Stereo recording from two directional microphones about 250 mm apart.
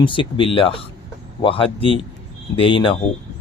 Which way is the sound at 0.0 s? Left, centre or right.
Centre.